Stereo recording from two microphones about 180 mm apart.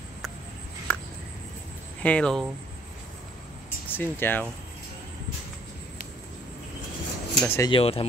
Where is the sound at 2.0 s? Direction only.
5° left (ahead or behind).